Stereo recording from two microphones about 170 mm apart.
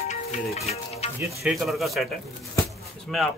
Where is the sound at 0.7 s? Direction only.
40° left (ahead or behind).